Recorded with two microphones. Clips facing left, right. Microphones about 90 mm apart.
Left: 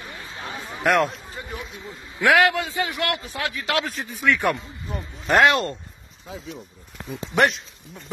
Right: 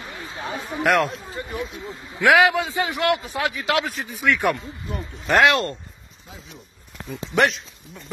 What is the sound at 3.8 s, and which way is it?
Speech, centre (ahead or behind).